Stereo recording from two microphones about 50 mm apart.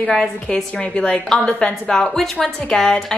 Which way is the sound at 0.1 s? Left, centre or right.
Centre.